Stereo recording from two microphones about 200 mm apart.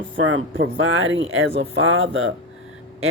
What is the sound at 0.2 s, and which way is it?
Speech, 75° right (ahead or behind).